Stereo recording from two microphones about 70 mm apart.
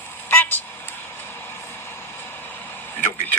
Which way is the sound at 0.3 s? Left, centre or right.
Left.